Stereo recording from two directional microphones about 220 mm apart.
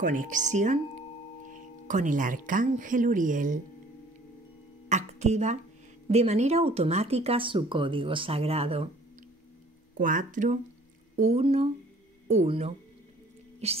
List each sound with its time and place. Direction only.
0.0 s speech: 35° right (ahead or behind)
1.9 s speech: 35° right (ahead or behind)
4.8 s speech: 30° right (ahead or behind)
9.9 s speech: 35° right (ahead or behind)